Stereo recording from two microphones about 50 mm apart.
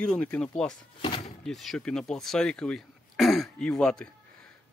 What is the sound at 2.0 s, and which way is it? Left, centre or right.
Speech, centre.